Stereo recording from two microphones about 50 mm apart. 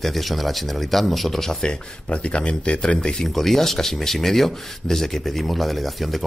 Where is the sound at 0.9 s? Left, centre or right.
Centre.